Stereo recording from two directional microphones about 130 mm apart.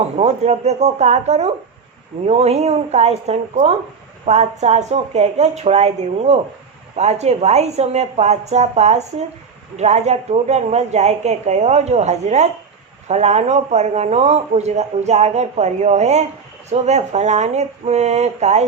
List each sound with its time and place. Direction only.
0.0 s speech: 55° right (ahead or behind)